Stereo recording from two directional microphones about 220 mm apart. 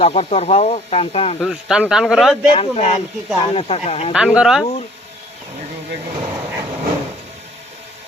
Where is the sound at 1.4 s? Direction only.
Centre (ahead or behind).